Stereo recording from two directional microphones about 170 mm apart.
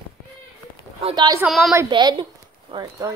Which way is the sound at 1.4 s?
Centre (ahead or behind).